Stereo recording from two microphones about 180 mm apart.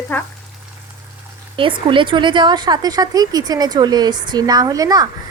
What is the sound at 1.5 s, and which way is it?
A woman's voice, 30° right (ahead or behind).